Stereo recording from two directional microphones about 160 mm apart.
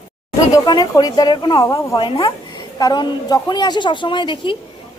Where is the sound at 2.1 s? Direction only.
35° left (ahead or behind).